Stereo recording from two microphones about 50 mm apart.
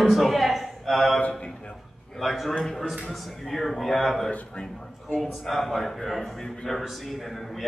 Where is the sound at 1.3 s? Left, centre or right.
Left.